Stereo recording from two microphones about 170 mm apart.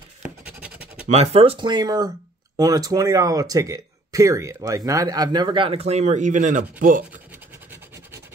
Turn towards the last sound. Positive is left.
turn(degrees=-50)  # may be behind; listen again after turning